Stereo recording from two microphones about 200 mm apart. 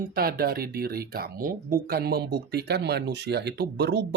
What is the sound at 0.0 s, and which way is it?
Speech, 50° right (ahead or behind).